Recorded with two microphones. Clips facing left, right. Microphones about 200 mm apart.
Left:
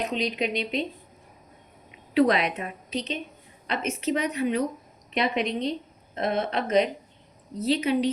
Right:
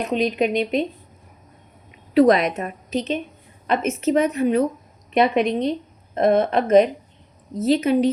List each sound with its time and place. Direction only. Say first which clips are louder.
0.0 s a woman's voice: right 7 dB; 50° right (ahead or behind)
2.1 s a woman's voice: right 6 dB; 45° right (ahead or behind)